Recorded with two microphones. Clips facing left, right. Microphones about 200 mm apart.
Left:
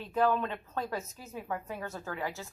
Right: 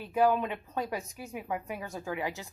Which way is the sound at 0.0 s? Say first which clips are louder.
Right 2 dB; 10° right (ahead or behind).